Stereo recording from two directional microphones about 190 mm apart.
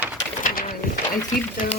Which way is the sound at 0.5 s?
50° left (ahead or behind).